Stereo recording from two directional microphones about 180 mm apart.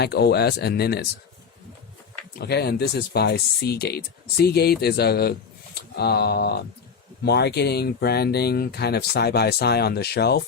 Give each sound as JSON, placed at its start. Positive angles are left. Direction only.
{"t": 0.0, "sound": "speech", "side_deg": 65}
{"t": 2.4, "sound": "speech", "side_deg": 65}